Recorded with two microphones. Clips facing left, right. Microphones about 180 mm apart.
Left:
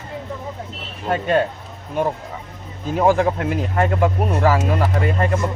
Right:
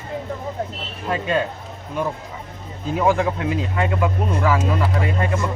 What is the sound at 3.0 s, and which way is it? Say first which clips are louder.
Speech: left 3 dB; 40° left (ahead or behind).